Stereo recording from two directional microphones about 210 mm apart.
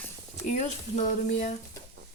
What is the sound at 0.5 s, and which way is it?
Speech, 35° left (ahead or behind).